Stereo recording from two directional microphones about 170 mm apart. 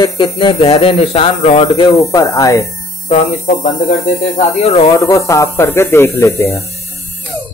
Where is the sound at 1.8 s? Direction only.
20° left (ahead or behind).